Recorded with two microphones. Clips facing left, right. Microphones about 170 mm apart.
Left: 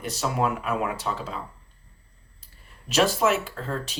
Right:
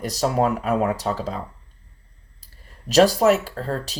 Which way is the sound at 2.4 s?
35° right (ahead or behind).